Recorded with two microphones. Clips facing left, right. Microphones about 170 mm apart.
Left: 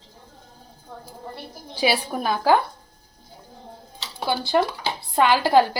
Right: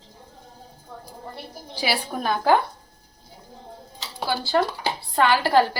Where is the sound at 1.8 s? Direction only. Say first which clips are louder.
Left 3 dB; 15° left (ahead or behind).